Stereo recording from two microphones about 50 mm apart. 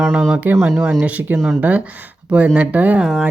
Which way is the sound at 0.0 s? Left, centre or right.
Right.